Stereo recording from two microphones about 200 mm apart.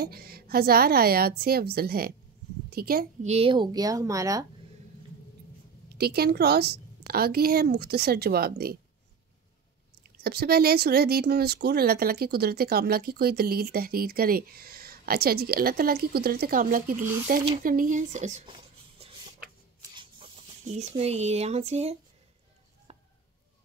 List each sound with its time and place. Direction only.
0.0 s speech: 50° right (ahead or behind)
3.3 s speech: 30° right (ahead or behind)
5.9 s speech: 50° right (ahead or behind)
10.1 s speech: 50° right (ahead or behind); by 18.6 s 35° right (ahead or behind)
19.9 s spray: 25° right (ahead or behind)
20.6 s speech: 35° right (ahead or behind)
22.9 s a sound: 30° right (ahead or behind)